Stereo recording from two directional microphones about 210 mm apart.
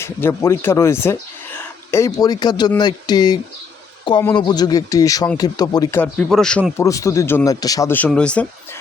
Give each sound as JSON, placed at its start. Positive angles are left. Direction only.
{"t": 0.0, "sound": "speech", "side_deg": 10}
{"t": 4.4, "sound": "speech", "side_deg": 20}